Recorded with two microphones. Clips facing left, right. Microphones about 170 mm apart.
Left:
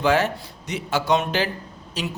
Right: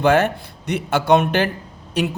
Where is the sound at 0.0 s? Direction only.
55° right (ahead or behind).